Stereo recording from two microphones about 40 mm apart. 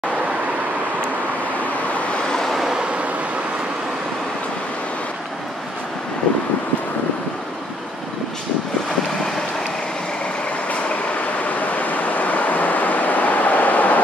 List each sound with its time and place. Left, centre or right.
2.7 s vehicle: right
11.4 s vehicle: left